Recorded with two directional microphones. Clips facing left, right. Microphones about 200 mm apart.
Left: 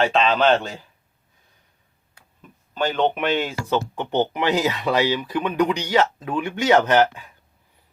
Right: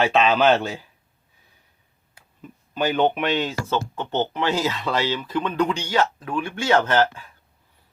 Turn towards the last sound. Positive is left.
turn(degrees=15)  # may be behind; listen again after turning